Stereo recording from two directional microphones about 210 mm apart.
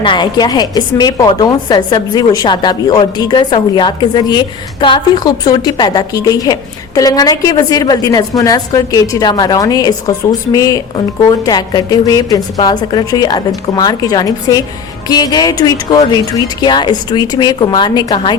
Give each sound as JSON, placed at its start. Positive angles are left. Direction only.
{"t": 0.0, "sound": "a woman's voice", "side_deg": 20}